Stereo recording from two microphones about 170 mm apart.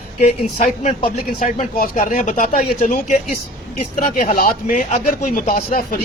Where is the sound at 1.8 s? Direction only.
55° left (ahead or behind).